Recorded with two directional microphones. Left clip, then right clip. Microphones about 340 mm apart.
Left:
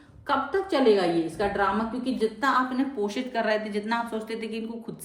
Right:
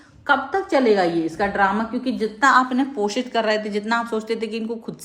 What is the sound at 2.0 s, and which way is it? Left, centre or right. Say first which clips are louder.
A woman's voice: right 8 dB; right.